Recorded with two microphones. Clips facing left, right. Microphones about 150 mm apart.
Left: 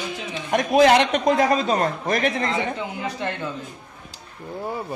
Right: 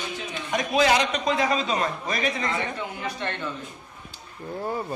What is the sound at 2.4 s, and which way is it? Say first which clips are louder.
Speech: left 4 dB; 25° left (ahead or behind).